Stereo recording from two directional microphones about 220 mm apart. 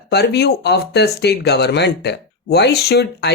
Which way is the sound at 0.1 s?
45° left (ahead or behind).